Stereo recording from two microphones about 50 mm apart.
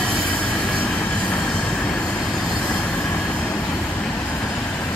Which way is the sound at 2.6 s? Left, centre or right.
Left.